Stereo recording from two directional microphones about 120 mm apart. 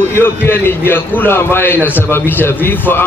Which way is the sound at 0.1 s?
20° left (ahead or behind).